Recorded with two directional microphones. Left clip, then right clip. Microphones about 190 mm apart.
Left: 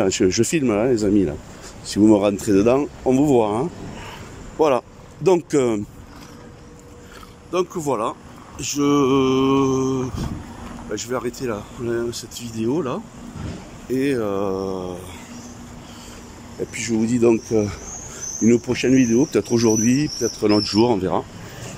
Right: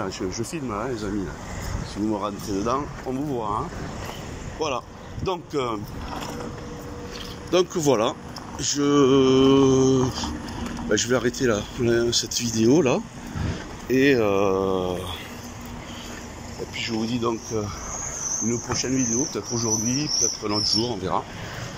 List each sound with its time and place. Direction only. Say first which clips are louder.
0.0 s speech: left 11 dB; 60° left (ahead or behind)
7.5 s speech: right 2 dB; 10° left (ahead or behind)
16.7 s speech: left 5 dB; 35° left (ahead or behind)